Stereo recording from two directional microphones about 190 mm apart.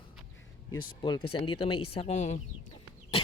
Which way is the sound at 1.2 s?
30° left (ahead or behind).